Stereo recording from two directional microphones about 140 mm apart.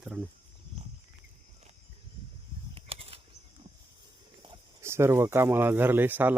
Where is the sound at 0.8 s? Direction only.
45° right (ahead or behind).